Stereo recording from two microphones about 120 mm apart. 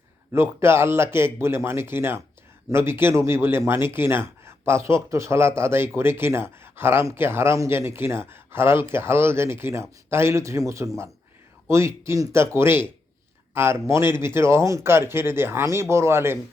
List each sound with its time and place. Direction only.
0.6 s speech: 20° right (ahead or behind)